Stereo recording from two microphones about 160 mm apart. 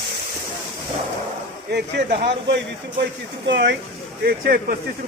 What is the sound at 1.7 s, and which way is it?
Speech, 90° right.